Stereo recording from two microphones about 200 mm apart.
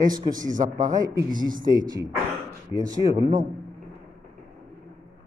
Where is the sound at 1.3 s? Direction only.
45° right (ahead or behind).